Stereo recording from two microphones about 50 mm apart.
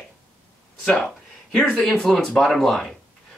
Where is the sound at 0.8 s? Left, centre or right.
Left.